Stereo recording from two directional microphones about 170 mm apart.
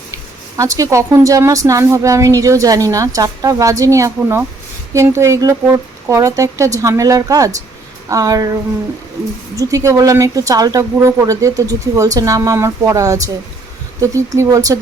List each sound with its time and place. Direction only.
0.1 s speech: 20° right (ahead or behind)
9.6 s speech: 20° right (ahead or behind)